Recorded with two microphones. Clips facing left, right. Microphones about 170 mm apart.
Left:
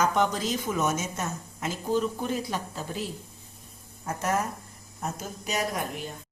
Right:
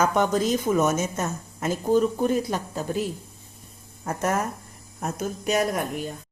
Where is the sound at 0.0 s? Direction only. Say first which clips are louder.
Right 4 dB; 50° right (ahead or behind).